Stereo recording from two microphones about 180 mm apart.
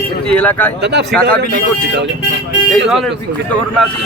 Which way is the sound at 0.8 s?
75° right (ahead or behind).